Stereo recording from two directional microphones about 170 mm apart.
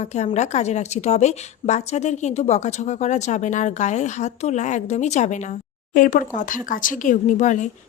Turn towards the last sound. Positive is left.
turn(degrees=45)  # may be behind; listen again after turning